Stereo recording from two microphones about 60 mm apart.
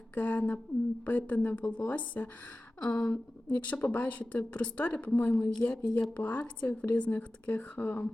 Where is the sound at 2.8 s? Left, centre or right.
Centre.